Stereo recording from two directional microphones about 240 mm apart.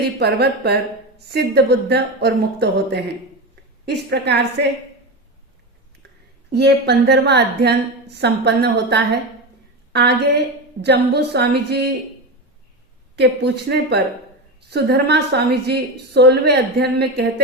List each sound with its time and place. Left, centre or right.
0.2 s a woman's voice: right
6.5 s a woman's voice: right
13.1 s a woman's voice: right